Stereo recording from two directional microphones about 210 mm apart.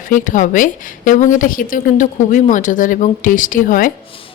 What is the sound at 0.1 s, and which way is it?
Speech, 40° left (ahead or behind).